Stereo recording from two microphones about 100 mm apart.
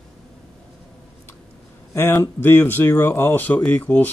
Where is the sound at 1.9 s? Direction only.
30° left (ahead or behind).